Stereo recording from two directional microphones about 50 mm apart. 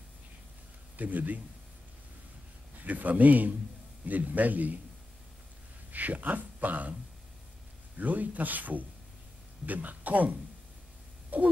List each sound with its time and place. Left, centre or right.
0.9 s speech: right
2.8 s speech: right
5.9 s a man's voice: right
8.0 s speech: right
11.2 s a sound: right